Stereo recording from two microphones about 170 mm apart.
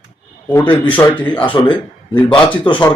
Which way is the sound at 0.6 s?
30° left (ahead or behind).